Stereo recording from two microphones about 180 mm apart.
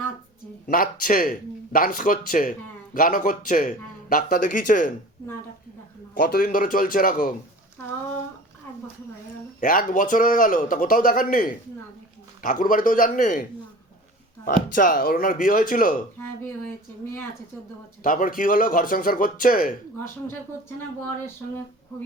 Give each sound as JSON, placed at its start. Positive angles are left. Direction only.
{"t": 0.7, "sound": "speech", "side_deg": 50}
{"t": 6.1, "sound": "speech", "side_deg": 60}
{"t": 9.6, "sound": "speech", "side_deg": 50}
{"t": 14.8, "sound": "speech", "side_deg": 50}
{"t": 18.0, "sound": "speech", "side_deg": 50}